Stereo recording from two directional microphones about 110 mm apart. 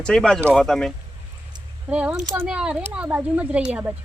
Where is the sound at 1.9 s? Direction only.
10° right (ahead or behind).